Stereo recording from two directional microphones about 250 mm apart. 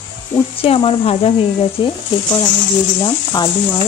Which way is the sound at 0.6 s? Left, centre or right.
Left.